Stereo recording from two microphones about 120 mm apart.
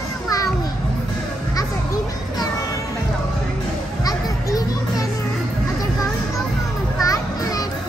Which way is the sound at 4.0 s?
30° left (ahead or behind).